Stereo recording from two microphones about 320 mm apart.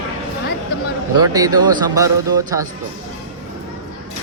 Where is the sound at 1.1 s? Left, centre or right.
Centre.